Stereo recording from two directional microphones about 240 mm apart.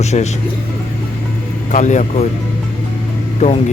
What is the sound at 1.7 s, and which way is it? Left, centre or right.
Speech, left.